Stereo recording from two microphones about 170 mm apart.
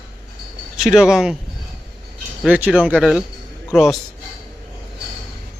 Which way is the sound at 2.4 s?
5° right (ahead or behind).